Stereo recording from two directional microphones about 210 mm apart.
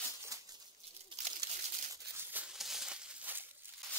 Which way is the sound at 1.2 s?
35° right (ahead or behind).